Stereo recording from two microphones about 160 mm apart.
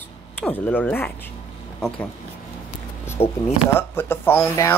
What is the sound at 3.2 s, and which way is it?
Speech, 40° left (ahead or behind).